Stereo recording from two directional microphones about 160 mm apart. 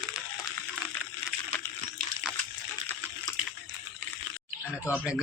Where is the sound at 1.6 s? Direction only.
15° left (ahead or behind).